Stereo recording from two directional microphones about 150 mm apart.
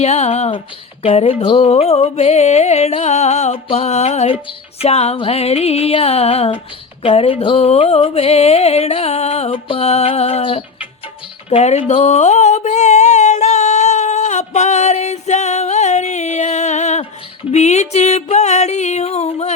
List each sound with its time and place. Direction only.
0.0 s music: 45° left (ahead or behind)
11.9 s a sound: 45° left (ahead or behind)
17.5 s music: 50° left (ahead or behind)